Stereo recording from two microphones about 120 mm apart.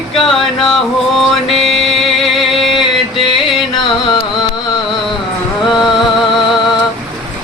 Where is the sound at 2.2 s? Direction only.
Centre (ahead or behind).